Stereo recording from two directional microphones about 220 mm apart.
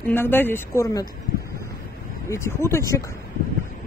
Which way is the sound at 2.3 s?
10° left (ahead or behind).